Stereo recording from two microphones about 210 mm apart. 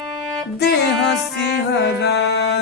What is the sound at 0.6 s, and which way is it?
Music, 50° left (ahead or behind).